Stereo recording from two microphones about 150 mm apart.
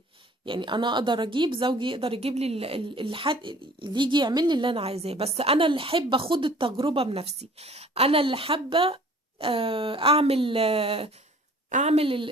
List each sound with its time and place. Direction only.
0.4 s speech: 35° right (ahead or behind)